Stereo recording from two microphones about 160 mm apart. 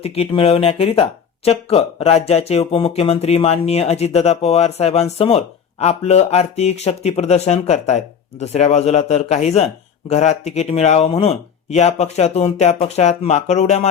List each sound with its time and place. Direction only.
0.0 s speech: 40° left (ahead or behind)